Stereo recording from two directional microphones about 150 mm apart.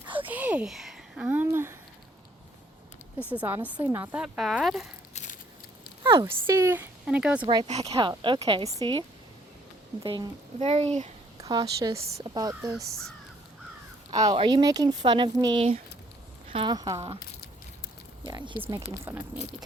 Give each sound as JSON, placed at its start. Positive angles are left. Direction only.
{"t": 0.3, "sound": "speech", "side_deg": -10}
{"t": 3.3, "sound": "speech", "side_deg": -10}
{"t": 5.1, "sound": "a sound", "side_deg": 55}
{"t": 6.0, "sound": "speech", "side_deg": -20}
{"t": 7.4, "sound": "a woman's voice", "side_deg": -35}
{"t": 10.0, "sound": "speech", "side_deg": -30}
{"t": 10.6, "sound": "speech", "side_deg": -45}
{"t": 11.3, "sound": "a woman's voice", "side_deg": -25}
{"t": 12.0, "sound": "speech", "side_deg": -45}
{"t": 12.3, "sound": "speech", "side_deg": -25}
{"t": 14.1, "sound": "a woman's voice", "side_deg": -25}
{"t": 18.3, "sound": "a woman's voice", "side_deg": -30}
{"t": 18.6, "sound": "speech", "side_deg": -20}